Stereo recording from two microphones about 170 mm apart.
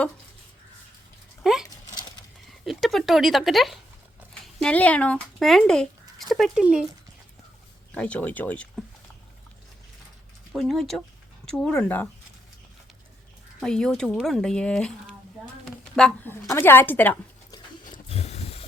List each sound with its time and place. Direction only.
1.4 s a sound: 5° right (ahead or behind)
2.6 s speech: centre (ahead or behind)
7.9 s speech: 10° left (ahead or behind)
10.5 s speech: centre (ahead or behind)
13.6 s a woman's voice: 5° left (ahead or behind)
17.5 s wild animals: 30° left (ahead or behind)